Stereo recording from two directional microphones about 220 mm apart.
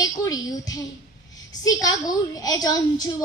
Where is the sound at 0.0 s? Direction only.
15° left (ahead or behind).